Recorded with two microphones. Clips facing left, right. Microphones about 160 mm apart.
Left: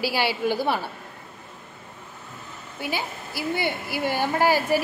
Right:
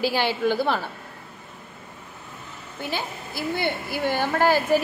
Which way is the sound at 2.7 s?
10° left (ahead or behind).